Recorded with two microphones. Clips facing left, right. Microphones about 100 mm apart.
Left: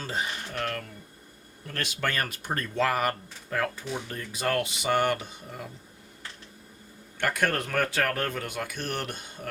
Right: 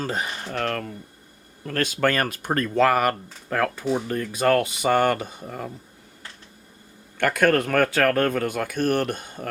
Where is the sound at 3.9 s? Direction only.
55° right (ahead or behind).